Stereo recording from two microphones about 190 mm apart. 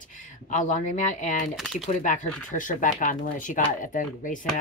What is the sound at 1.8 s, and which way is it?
A woman's voice, 40° left (ahead or behind).